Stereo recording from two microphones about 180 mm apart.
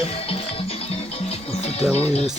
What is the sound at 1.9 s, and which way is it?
Speech, 35° left (ahead or behind).